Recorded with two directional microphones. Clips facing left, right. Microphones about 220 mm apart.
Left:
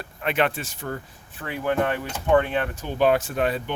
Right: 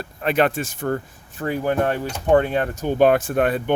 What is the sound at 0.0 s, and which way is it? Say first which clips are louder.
Speech: right 4 dB; 40° right (ahead or behind).